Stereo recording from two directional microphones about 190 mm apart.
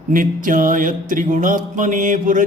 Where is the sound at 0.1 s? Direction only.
45° right (ahead or behind).